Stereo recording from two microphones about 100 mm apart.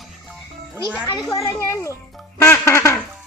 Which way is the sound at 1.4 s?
30° left (ahead or behind).